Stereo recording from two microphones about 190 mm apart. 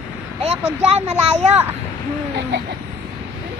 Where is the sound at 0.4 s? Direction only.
35° right (ahead or behind).